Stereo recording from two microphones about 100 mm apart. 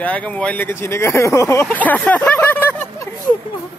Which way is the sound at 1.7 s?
15° left (ahead or behind).